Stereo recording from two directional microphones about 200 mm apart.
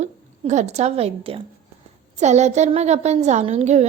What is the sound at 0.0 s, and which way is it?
A woman's voice, 35° right (ahead or behind).